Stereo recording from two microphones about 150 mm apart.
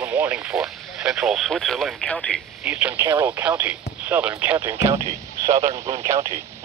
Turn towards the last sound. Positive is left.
turn(degrees=-20)  # may be behind; listen again after turning